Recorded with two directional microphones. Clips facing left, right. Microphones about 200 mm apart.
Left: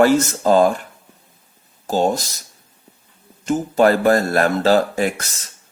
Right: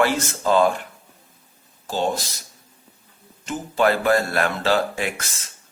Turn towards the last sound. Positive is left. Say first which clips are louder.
# left 6 dB
turn(degrees=40)  # may be behind; listen again after turning